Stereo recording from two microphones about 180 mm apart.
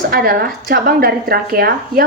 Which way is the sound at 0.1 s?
55° right (ahead or behind).